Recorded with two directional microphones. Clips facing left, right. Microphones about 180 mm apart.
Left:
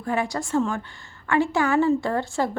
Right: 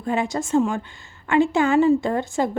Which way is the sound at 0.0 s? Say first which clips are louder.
Right 2 dB; 20° right (ahead or behind).